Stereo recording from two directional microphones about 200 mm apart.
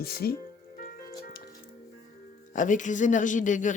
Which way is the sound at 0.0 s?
50° left (ahead or behind).